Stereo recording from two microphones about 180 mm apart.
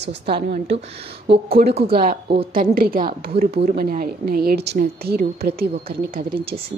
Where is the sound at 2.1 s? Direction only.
30° right (ahead or behind).